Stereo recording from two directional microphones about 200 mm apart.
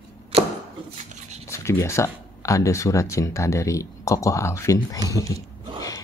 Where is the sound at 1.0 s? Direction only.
35° right (ahead or behind).